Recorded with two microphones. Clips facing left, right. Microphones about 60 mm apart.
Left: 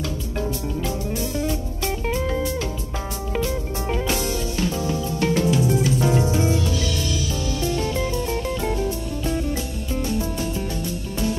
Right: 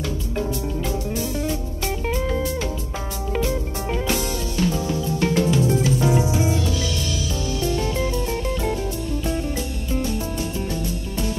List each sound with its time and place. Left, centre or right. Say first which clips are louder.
1.1 s music: even; centre
1.4 s music: even; centre
6.0 s music: even; centre
9.2 s music: left 2 dB; right